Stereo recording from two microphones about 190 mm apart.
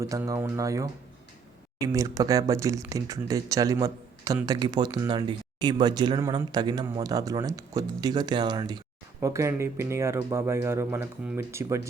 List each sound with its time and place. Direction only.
0.0 s speech: 15° right (ahead or behind)